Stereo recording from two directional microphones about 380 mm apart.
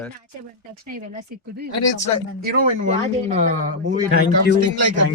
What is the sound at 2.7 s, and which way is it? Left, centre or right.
Speech, centre.